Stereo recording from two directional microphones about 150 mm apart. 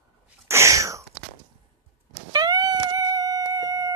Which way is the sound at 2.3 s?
25° right (ahead or behind).